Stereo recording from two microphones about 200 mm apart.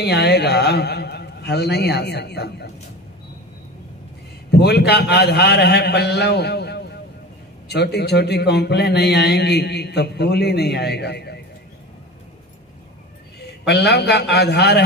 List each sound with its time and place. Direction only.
0.0 s a man's voice: 55° left (ahead or behind)
4.5 s a man's voice: 55° left (ahead or behind)
13.7 s a man's voice: 55° left (ahead or behind)